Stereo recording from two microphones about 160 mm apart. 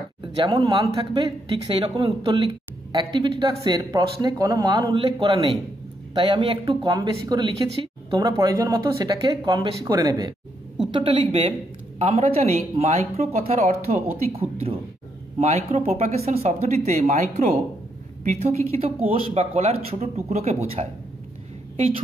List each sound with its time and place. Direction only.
0.2 s speech: 30° right (ahead or behind)